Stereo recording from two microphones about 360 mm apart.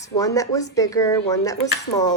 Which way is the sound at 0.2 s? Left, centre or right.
Centre.